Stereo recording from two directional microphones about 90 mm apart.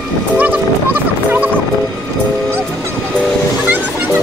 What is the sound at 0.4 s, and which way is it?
Music, 20° right (ahead or behind).